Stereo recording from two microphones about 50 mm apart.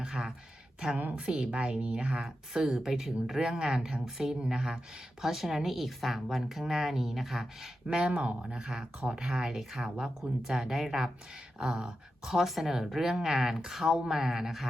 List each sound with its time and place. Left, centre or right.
0.0 s a woman's voice: centre
2.2 s speech: centre
7.9 s speech: centre